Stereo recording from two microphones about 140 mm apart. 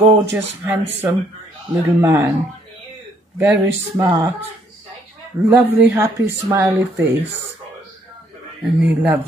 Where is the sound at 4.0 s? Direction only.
15° right (ahead or behind).